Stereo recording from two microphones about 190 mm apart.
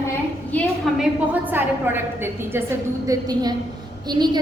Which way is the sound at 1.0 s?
10° right (ahead or behind).